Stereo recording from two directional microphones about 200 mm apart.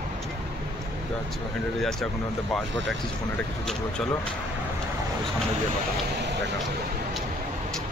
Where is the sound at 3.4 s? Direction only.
5° left (ahead or behind).